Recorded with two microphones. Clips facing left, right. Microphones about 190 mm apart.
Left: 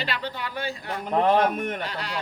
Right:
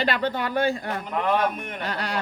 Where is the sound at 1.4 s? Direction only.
45° left (ahead or behind).